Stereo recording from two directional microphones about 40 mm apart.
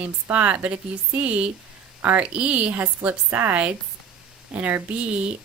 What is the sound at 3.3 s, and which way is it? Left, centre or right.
Speech, right.